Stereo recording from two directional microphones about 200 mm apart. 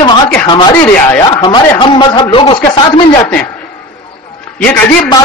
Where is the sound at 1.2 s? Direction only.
20° left (ahead or behind).